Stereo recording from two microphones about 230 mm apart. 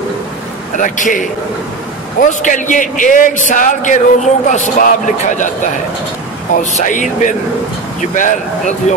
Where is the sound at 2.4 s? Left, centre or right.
Left.